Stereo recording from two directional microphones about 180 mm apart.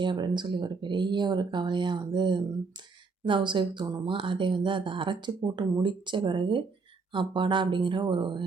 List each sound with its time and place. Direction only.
0.0 s speech: 25° right (ahead or behind)